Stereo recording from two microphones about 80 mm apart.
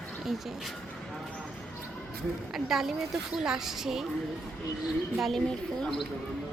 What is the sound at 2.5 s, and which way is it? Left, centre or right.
A woman's voice, centre.